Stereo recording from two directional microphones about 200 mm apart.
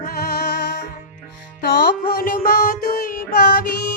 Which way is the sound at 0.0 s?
50° left (ahead or behind).